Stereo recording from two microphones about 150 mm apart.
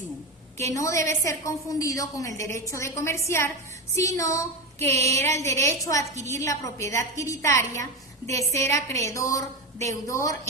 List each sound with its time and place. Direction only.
0.7 s a woman's voice: 20° left (ahead or behind)
4.9 s a sound: 45° right (ahead or behind)
5.4 s a woman's voice: 20° left (ahead or behind)